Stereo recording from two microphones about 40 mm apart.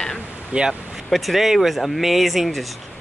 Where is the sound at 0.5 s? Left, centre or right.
Right.